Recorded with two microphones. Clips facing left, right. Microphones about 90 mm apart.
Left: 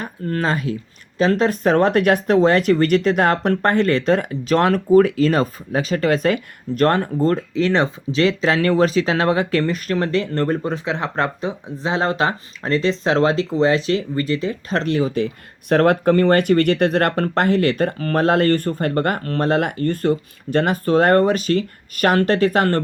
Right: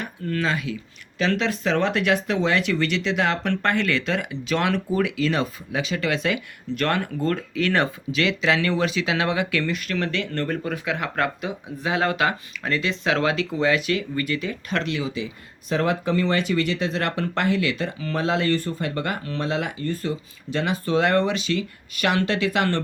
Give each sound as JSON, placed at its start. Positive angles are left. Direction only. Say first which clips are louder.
{"t": 0.0, "sound": "speech", "louder": "left 3 dB", "side_deg": 40}